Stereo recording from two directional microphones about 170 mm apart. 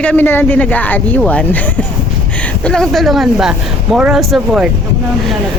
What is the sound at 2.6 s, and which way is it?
Speech, 5° left (ahead or behind).